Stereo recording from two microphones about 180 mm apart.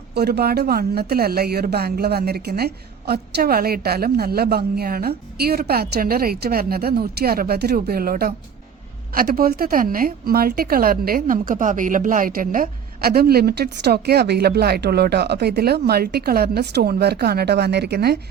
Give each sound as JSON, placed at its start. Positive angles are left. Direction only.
{"t": 0.1, "sound": "a woman's voice", "side_deg": -65}